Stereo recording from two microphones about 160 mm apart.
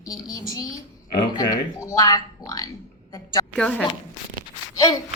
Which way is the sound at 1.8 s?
20° left (ahead or behind).